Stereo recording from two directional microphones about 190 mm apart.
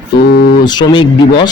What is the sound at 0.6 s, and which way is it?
Speech, 20° left (ahead or behind).